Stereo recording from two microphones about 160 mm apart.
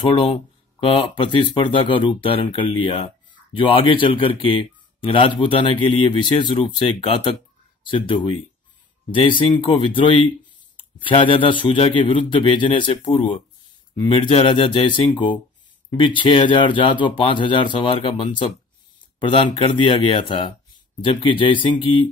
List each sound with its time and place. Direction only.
0.0 s speech: 30° left (ahead or behind)